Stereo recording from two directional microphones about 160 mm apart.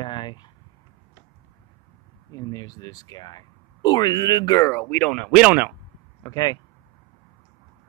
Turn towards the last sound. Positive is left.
turn(degrees=25)  # may be behind; listen again after turning